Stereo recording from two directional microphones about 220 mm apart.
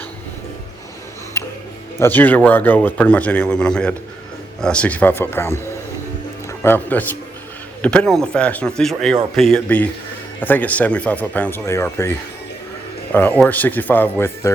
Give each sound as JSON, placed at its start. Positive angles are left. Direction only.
{"t": 1.4, "sound": "music", "side_deg": 15}
{"t": 2.0, "sound": "speech", "side_deg": 10}
{"t": 6.6, "sound": "speech", "side_deg": 10}
{"t": 13.1, "sound": "speech", "side_deg": 5}